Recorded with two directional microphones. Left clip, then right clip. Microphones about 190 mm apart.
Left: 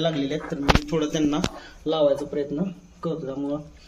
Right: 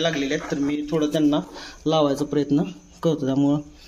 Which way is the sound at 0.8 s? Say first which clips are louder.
Right 3 dB; 35° right (ahead or behind).